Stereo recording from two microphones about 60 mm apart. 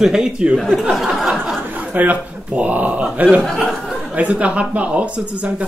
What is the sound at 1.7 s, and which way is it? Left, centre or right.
Speech, right.